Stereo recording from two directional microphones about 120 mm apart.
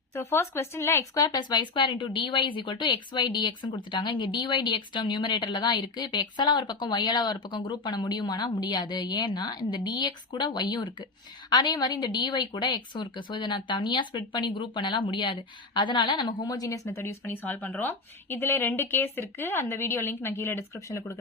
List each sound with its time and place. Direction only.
0.1 s a woman's voice: 20° left (ahead or behind)